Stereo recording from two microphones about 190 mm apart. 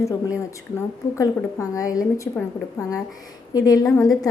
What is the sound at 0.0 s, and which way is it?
A woman's voice, 15° left (ahead or behind).